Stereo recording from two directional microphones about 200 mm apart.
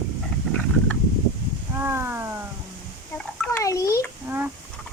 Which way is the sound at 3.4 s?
15° left (ahead or behind).